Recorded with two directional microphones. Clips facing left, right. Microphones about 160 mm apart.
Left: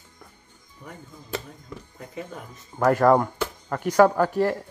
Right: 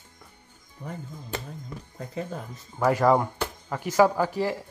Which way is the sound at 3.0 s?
10° right (ahead or behind).